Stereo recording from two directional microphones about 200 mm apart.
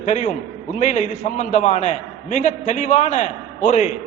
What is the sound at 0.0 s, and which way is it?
A man's voice, 35° left (ahead or behind).